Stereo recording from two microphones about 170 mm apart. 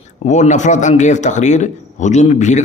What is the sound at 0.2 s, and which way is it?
Speech, 45° left (ahead or behind).